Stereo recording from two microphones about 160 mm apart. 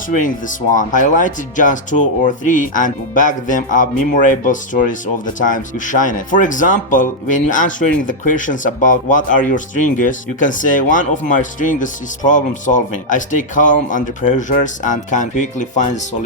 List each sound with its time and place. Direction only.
0.1 s speech: 55° left (ahead or behind)